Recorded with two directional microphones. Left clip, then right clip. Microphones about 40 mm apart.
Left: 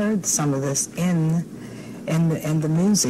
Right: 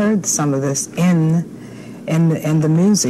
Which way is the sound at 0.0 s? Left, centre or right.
Right.